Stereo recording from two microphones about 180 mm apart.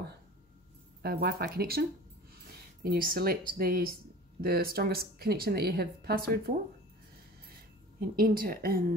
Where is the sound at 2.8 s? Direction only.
55° right (ahead or behind).